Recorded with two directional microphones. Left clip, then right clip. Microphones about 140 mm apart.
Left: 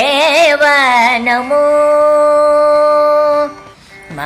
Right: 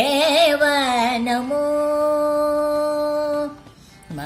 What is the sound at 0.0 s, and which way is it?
Music, 50° right (ahead or behind).